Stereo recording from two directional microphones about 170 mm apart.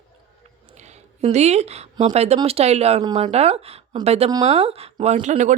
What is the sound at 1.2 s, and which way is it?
Speech, 40° right (ahead or behind).